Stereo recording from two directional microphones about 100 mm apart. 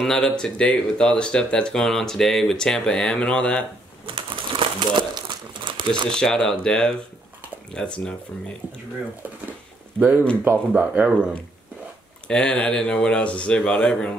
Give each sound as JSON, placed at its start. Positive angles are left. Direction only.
{"t": 0.0, "sound": "speech", "side_deg": 5}
{"t": 4.0, "sound": "crumpling", "side_deg": -60}
{"t": 6.0, "sound": "speech", "side_deg": 5}
{"t": 9.5, "sound": "a sound", "side_deg": -15}
{"t": 10.7, "sound": "speech", "side_deg": -15}
{"t": 12.3, "sound": "speech", "side_deg": 10}